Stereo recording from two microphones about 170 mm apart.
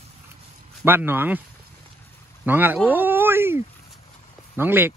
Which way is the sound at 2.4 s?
10° right (ahead or behind).